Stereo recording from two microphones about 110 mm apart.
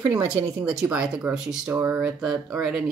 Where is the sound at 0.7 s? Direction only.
10° right (ahead or behind).